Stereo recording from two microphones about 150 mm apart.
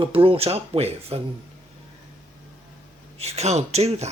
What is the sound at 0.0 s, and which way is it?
Speech, 35° right (ahead or behind).